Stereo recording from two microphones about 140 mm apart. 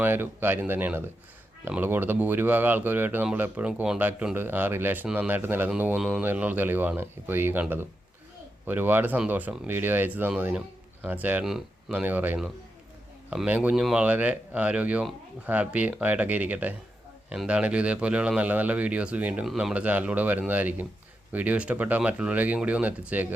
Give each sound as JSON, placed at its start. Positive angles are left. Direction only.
{"t": 0.0, "sound": "speech", "side_deg": -15}